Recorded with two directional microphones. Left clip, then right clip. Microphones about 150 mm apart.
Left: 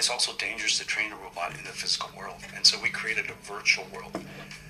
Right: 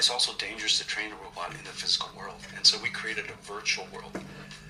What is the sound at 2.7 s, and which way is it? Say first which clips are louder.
Speech: even; 40° left (ahead or behind).